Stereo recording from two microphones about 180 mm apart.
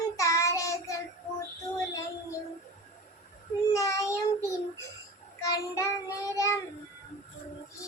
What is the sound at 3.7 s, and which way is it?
Child singing, 15° left (ahead or behind).